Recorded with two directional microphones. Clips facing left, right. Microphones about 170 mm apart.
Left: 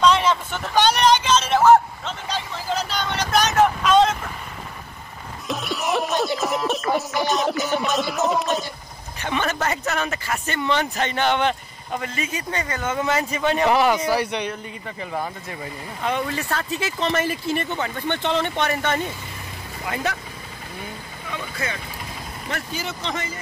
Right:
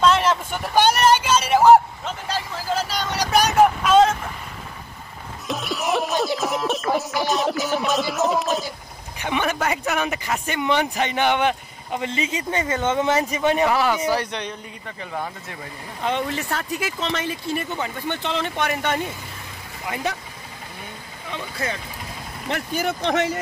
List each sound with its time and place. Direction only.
0.0 s vehicle: 5° right (ahead or behind)
5.5 s a sound: centre (ahead or behind)
9.2 s speech: 10° right (ahead or behind)
13.7 s a man's voice: 20° left (ahead or behind)
16.0 s speech: 25° right (ahead or behind)
17.2 s speech: 5° left (ahead or behind)
17.6 s speech: 10° right (ahead or behind)
18.7 s speech: 15° right (ahead or behind)
21.3 s speech: 35° right (ahead or behind)
22.5 s speech: 55° right (ahead or behind); by 23.4 s 75° right (ahead or behind)